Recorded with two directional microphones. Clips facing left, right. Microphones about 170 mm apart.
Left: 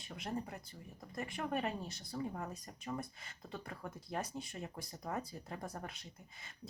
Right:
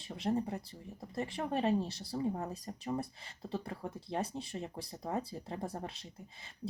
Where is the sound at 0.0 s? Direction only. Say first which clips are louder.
Right 8 dB; 30° right (ahead or behind).